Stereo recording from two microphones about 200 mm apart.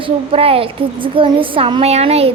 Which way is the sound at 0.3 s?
30° right (ahead or behind).